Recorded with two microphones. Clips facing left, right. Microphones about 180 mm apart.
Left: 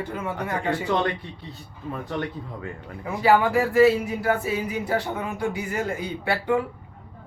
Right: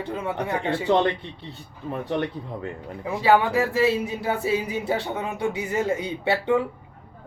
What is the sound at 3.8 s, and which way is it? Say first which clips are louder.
A man's voice: left 4 dB; 25° right (ahead or behind).